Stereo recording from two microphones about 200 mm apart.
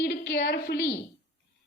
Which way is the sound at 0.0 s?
55° left (ahead or behind).